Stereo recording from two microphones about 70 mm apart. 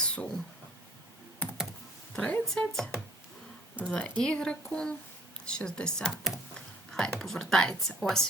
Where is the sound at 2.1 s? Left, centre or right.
Centre.